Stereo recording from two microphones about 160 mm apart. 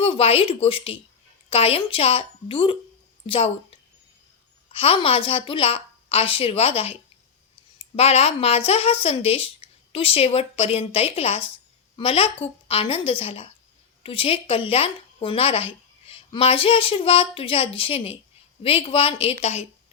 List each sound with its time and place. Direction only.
0.0 s a woman's voice: 35° left (ahead or behind)
4.7 s a woman's voice: 35° left (ahead or behind)